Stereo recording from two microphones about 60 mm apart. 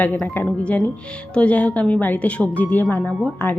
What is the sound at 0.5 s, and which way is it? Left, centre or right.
Speech, left.